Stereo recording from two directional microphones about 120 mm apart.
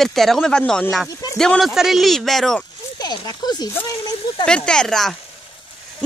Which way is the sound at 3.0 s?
35° left (ahead or behind).